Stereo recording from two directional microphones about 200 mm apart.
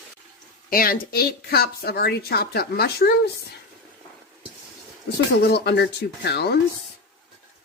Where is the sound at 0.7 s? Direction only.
45° left (ahead or behind).